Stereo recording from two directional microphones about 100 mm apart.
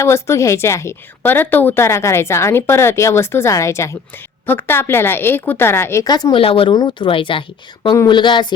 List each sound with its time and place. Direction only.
0.0 s a woman's voice: 25° left (ahead or behind)
6.1 s speech: 40° left (ahead or behind)
6.3 s speech: 65° left (ahead or behind)
6.7 s speech: 50° left (ahead or behind)